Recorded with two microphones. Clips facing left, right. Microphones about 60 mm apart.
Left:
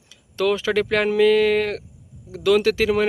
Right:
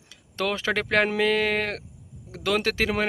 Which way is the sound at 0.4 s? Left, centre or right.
Right.